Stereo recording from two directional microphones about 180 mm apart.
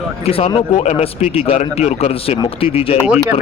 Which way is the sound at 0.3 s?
35° left (ahead or behind).